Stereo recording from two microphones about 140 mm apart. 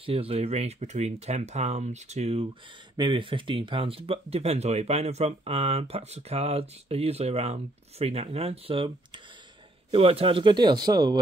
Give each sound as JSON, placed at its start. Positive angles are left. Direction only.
{"t": 0.0, "sound": "speech", "side_deg": -45}
{"t": 3.0, "sound": "speech", "side_deg": -35}